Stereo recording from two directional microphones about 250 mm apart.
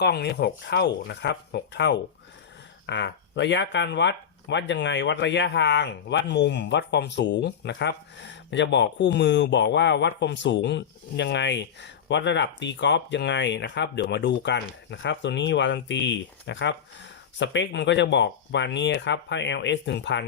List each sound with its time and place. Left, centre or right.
0.0 s speech: left